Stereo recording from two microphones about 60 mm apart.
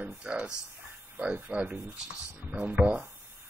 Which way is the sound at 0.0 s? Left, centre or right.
Centre.